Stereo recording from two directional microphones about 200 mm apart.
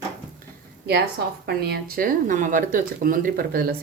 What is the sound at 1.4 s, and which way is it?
Speech, 50° right (ahead or behind).